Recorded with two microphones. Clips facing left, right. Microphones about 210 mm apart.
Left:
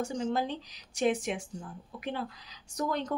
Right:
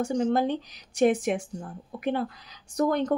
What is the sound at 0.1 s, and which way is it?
Speech, 60° right (ahead or behind).